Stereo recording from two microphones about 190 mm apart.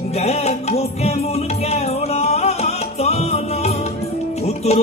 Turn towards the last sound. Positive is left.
turn(degrees=35)  # may be behind; listen again after turning